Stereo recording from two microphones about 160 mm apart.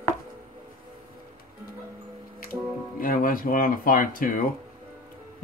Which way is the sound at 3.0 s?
60° left (ahead or behind).